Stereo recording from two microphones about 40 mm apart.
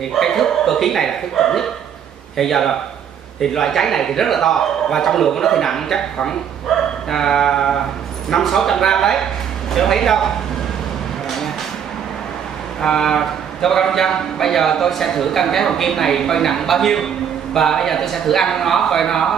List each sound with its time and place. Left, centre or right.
0.1 s a man's voice: centre
7.1 s a man's voice: centre
12.8 s a man's voice: centre